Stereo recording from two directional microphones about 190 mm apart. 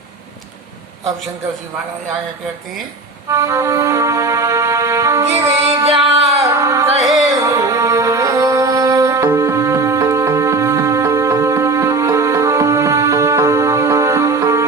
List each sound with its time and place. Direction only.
3.2 s music: 15° right (ahead or behind)
5.5 s music: 35° right (ahead or behind)
6.3 s a sound: 15° right (ahead or behind)
7.3 s music: 15° right (ahead or behind)